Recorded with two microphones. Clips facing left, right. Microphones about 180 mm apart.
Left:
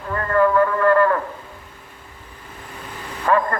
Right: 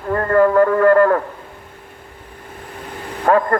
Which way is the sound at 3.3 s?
50° right (ahead or behind).